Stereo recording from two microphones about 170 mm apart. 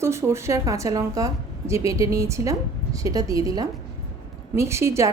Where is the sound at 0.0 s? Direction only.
15° right (ahead or behind).